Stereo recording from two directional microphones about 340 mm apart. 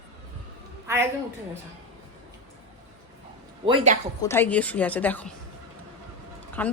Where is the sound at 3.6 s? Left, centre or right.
Centre.